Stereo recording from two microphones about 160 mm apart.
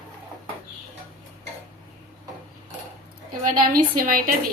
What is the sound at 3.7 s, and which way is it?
Speech, 60° right (ahead or behind).